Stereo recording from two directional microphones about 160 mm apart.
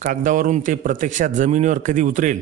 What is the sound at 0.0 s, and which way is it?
A man's voice, 55° right (ahead or behind).